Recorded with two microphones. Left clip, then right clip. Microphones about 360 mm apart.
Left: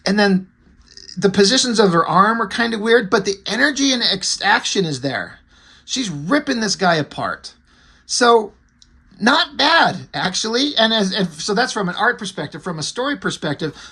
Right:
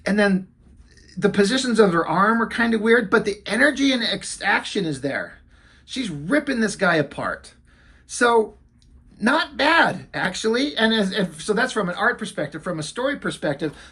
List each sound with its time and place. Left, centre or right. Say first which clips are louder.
0.0 s speech: left 3 dB; centre